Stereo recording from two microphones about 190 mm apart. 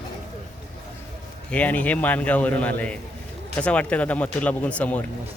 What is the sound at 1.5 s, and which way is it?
Speech, 10° left (ahead or behind).